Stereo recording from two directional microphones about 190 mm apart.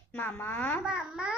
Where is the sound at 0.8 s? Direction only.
5° right (ahead or behind).